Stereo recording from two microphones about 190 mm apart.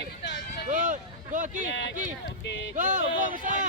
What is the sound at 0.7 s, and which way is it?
Speech, 45° right (ahead or behind).